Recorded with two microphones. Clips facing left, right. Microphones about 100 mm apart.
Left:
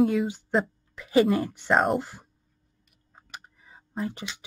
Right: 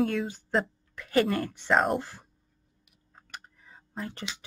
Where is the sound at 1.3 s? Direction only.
5° left (ahead or behind).